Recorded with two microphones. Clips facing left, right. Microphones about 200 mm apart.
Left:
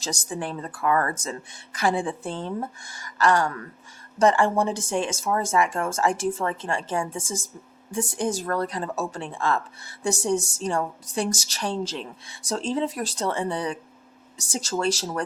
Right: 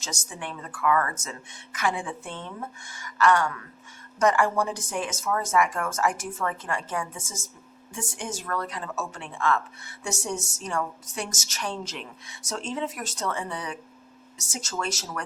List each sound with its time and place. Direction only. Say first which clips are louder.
0.0 s a woman's voice: left 7 dB; 35° left (ahead or behind)